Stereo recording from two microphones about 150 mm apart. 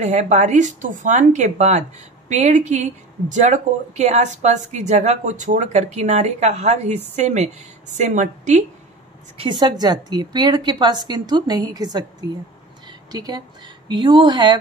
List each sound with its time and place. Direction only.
0.0 s speech: 50° right (ahead or behind)
9.4 s a woman's voice: 30° right (ahead or behind)
12.8 s a sound: 25° right (ahead or behind)
13.8 s speech: 30° right (ahead or behind)